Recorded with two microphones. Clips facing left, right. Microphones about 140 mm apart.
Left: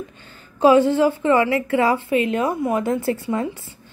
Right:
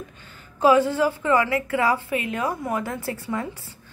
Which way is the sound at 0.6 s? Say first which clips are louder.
Left 4 dB; 25° left (ahead or behind).